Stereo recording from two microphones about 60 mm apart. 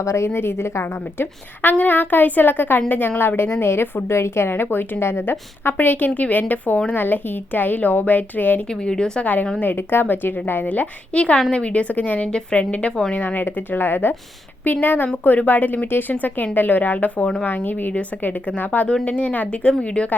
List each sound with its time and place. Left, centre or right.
0.0 s a woman's voice: left
0.3 s a woman's voice: left
8.7 s a woman's voice: centre
9.2 s a woman's voice: left